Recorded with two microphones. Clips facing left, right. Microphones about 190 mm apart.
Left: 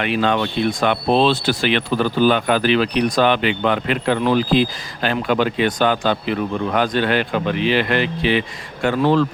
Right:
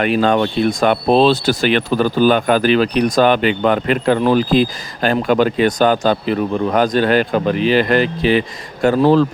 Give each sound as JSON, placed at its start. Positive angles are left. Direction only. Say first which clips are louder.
{"t": 0.0, "sound": "speech", "louder": "right 4 dB", "side_deg": -45}